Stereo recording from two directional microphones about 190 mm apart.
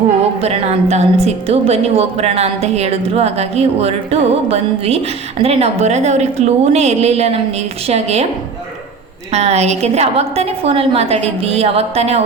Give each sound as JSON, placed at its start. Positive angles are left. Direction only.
{"t": 0.3, "sound": "a woman's voice", "side_deg": -35}
{"t": 9.3, "sound": "a woman's voice", "side_deg": -35}